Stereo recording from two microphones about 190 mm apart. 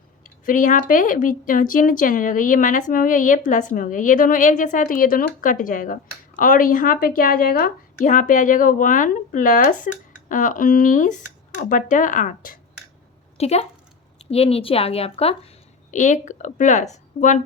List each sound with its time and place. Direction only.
0.4 s speech: 45° left (ahead or behind)
13.3 s a woman's voice: 35° left (ahead or behind)